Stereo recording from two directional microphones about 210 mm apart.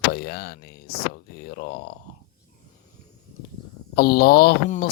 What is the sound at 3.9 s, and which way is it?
Speech, 50° left (ahead or behind).